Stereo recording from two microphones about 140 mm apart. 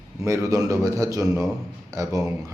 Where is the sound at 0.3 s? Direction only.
20° right (ahead or behind).